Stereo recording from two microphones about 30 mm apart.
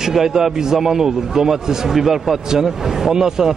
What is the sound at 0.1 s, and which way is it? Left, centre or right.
A man's voice, centre.